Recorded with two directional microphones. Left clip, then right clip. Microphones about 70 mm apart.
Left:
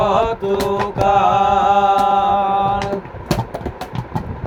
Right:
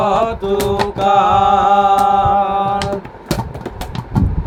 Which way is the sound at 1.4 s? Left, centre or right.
Right.